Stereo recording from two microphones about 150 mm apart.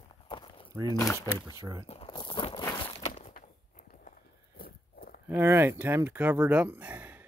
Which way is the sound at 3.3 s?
60° left (ahead or behind).